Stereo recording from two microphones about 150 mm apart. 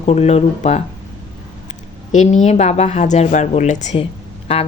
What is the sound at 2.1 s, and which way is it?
A woman's voice, 50° left (ahead or behind).